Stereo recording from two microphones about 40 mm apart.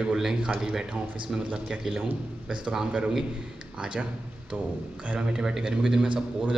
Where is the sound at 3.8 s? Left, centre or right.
Right.